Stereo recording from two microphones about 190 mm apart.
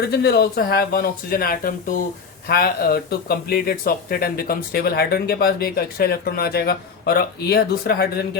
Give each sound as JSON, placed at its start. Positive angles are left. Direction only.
{"t": 0.1, "sound": "speech", "side_deg": 60}